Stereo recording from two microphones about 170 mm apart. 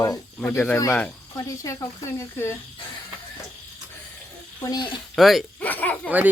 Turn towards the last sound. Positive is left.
turn(degrees=10)  # may be behind; listen again after turning